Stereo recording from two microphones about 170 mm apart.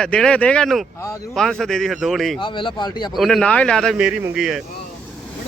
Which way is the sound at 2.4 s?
30° left (ahead or behind).